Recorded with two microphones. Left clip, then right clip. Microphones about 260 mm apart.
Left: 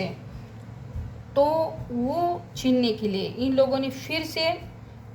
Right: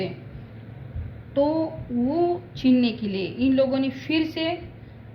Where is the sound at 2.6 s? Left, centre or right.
Left.